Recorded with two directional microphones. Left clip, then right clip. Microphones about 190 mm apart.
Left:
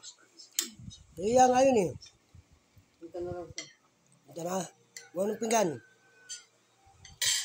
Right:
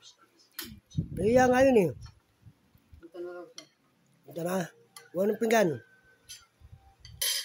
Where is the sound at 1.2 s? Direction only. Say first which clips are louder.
Right 1 dB; 45° right (ahead or behind).